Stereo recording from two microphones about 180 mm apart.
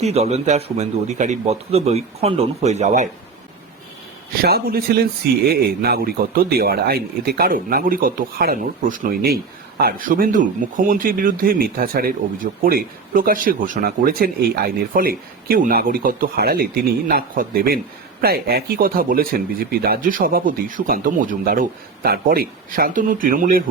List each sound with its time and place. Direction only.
0.0 s a man's voice: 35° right (ahead or behind)
4.4 s a man's voice: 60° right (ahead or behind)